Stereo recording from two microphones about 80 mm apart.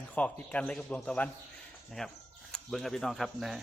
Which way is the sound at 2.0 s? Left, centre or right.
Centre.